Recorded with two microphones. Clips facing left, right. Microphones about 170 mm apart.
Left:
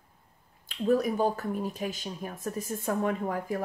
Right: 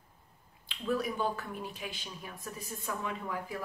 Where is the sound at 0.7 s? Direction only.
45° left (ahead or behind).